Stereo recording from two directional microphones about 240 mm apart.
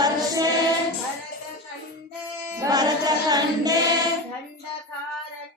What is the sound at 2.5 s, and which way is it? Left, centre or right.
Choir, centre.